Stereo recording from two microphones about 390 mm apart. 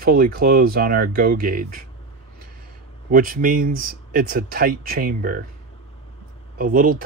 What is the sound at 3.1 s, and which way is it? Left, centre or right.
Speech, right.